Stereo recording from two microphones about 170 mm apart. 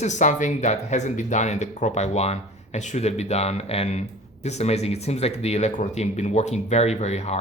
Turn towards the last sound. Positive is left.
turn(degrees=40)  # may be behind; listen again after turning